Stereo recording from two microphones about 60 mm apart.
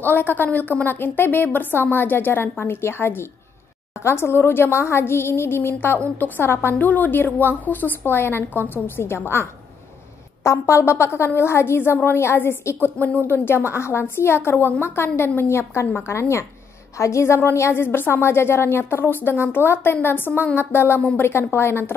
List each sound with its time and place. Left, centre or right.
0.0 s a woman's voice: left
5.9 s a woman's voice: left
10.4 s a woman's voice: left